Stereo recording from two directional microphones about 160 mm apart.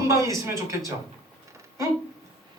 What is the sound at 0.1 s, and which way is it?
Speech, 20° right (ahead or behind).